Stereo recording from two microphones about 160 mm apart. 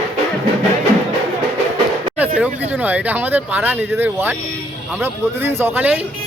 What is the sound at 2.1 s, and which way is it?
Speech, 10° right (ahead or behind).